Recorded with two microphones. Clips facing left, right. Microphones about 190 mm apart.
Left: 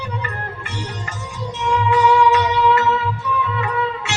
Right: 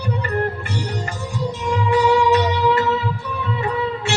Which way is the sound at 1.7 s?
35° right (ahead or behind).